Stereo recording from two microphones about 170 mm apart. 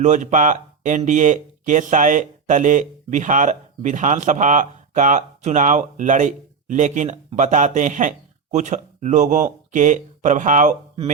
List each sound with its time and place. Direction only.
0.0 s speech: 45° right (ahead or behind)